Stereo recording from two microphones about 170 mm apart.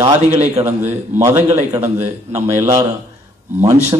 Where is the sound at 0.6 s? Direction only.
35° right (ahead or behind).